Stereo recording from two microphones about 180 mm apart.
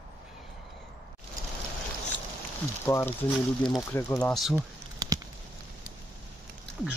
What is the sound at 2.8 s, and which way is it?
Speech, 10° left (ahead or behind).